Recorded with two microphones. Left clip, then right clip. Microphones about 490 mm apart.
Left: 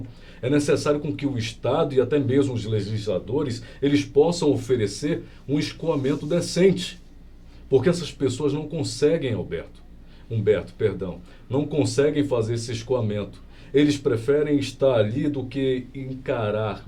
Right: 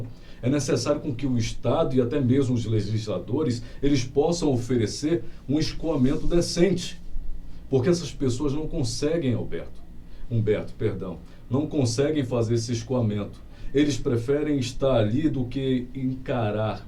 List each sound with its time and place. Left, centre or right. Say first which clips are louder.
0.4 s a man's voice: left 3 dB; left